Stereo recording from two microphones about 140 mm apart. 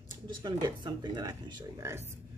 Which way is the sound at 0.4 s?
30° right (ahead or behind).